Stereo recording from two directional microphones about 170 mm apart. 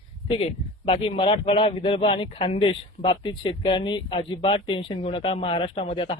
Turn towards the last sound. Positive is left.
turn(degrees=35)  # may be behind; listen again after turning